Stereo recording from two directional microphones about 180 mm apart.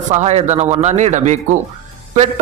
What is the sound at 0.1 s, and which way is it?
Speech, 40° right (ahead or behind).